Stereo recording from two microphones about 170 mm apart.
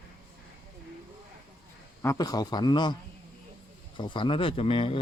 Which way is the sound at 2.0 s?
20° left (ahead or behind).